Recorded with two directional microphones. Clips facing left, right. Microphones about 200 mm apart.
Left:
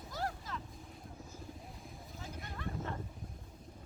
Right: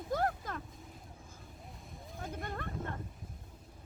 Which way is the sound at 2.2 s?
55° right (ahead or behind).